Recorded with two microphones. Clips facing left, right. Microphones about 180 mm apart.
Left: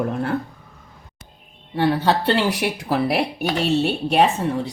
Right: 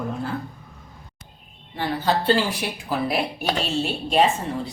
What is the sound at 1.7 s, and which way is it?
A woman's voice, 70° left (ahead or behind).